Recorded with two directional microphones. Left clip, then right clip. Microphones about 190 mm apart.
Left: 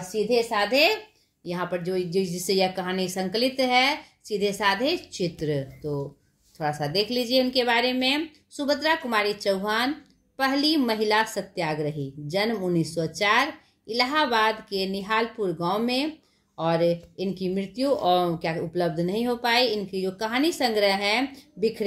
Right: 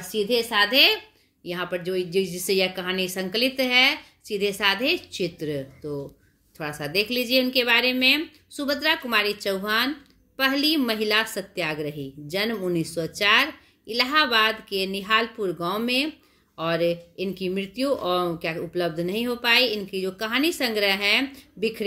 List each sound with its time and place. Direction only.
0.5 s a woman's voice: 30° right (ahead or behind)
1.4 s a woman's voice: 15° right (ahead or behind)